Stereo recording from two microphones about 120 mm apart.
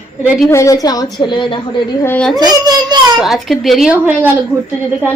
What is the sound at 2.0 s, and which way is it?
Speech, 10° left (ahead or behind).